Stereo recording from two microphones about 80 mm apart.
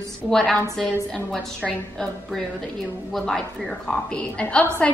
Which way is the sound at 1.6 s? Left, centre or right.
Centre.